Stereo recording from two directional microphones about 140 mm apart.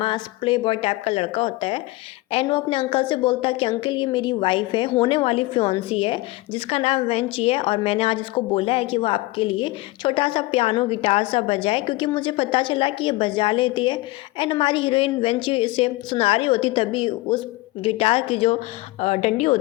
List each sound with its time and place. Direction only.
0.0 s a woman's voice: 35° left (ahead or behind)